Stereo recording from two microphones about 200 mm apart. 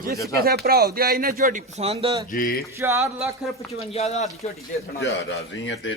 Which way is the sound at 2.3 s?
45° left (ahead or behind).